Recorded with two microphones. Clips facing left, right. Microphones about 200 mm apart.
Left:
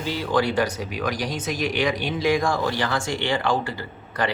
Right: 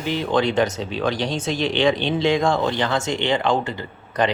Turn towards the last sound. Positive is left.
turn(degrees=-20)  # may be behind; listen again after turning